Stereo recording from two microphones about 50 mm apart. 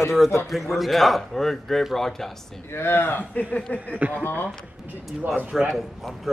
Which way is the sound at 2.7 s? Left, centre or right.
Left.